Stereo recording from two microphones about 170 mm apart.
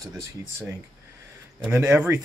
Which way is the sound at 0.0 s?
15° right (ahead or behind).